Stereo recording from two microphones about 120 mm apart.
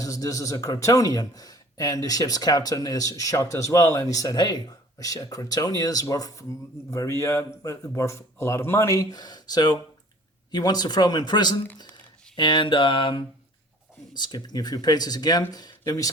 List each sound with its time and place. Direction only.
0.0 s speech: 30° left (ahead or behind)
12.4 s mantra: 40° left (ahead or behind)
14.1 s speech: 35° left (ahead or behind)